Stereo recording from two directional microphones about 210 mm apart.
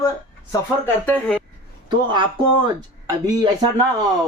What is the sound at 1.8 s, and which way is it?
Speech, 20° right (ahead or behind).